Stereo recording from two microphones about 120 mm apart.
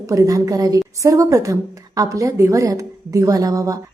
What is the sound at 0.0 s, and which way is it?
A woman's voice, 25° right (ahead or behind).